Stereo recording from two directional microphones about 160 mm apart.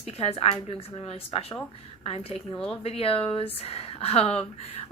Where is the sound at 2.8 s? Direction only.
35° left (ahead or behind).